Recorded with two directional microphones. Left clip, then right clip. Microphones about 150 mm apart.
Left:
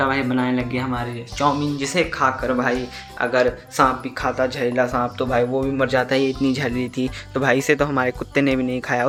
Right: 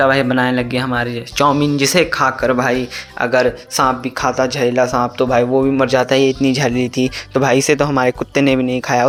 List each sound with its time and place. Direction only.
0.0 s speech: 50° right (ahead or behind)